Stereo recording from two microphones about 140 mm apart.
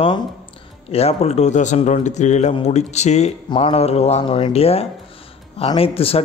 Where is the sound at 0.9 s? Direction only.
50° left (ahead or behind).